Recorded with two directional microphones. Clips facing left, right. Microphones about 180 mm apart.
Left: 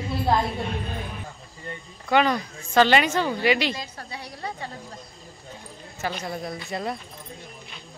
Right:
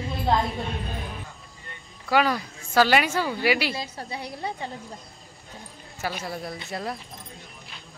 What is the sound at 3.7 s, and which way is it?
Speech, 25° right (ahead or behind).